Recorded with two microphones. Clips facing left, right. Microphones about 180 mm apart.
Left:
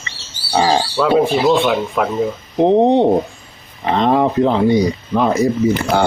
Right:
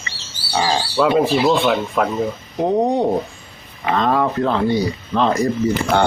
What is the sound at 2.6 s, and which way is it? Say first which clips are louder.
Speech: left 6 dB; 25° left (ahead or behind).